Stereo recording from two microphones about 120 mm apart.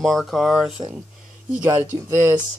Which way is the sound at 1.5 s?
15° right (ahead or behind).